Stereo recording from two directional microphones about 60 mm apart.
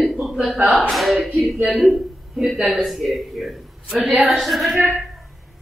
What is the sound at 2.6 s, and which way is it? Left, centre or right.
A man's voice, centre.